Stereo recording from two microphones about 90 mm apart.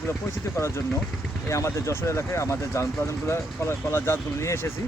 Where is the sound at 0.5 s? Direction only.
30° left (ahead or behind).